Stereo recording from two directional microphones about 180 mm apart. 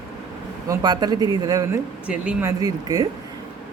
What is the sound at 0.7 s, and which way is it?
Speech, 20° right (ahead or behind).